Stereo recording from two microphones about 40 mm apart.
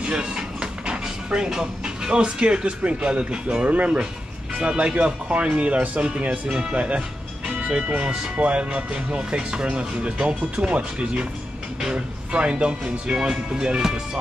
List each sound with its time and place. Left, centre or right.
0.0 s music: right
3.2 s speech: right
4.6 s speech: right